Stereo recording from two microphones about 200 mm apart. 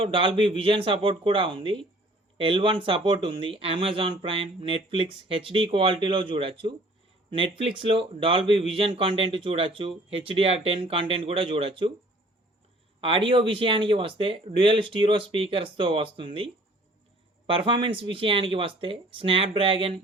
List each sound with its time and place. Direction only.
0.0 s speech: 25° right (ahead or behind)
13.0 s speech: 25° right (ahead or behind)